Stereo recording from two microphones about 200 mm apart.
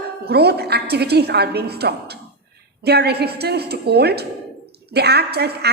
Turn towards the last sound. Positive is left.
turn(degrees=-55)  # may be behind; listen again after turning